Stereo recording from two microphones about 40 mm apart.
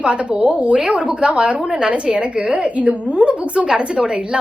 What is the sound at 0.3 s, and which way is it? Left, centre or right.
A woman's voice, right.